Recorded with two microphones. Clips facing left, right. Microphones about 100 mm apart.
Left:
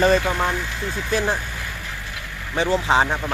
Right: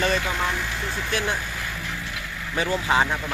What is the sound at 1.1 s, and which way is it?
Speech, 35° left (ahead or behind).